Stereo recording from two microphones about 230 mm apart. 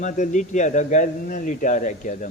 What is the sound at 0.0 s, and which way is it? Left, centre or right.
Speech, left.